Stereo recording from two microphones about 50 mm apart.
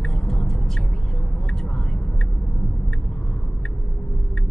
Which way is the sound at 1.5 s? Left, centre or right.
Centre.